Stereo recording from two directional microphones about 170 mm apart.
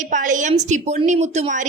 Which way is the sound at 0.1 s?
45° right (ahead or behind).